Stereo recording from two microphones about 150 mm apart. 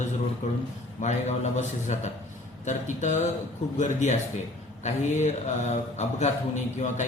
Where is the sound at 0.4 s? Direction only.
55° left (ahead or behind).